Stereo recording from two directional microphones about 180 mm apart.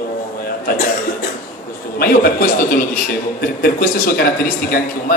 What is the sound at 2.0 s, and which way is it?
A man's voice, 55° left (ahead or behind).